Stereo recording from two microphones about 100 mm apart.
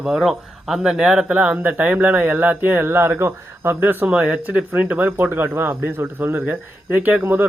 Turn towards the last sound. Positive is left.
turn(degrees=-20)  # may be behind; listen again after turning